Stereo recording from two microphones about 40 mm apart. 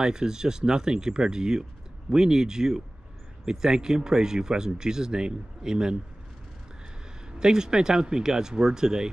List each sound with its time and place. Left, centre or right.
0.0 s speech: centre
7.3 s speech: centre